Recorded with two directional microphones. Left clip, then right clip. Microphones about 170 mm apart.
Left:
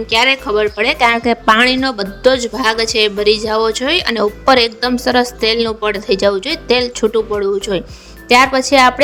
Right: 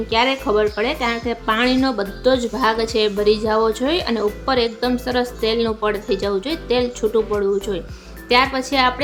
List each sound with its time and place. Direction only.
0.1 s a woman's voice: 45° left (ahead or behind)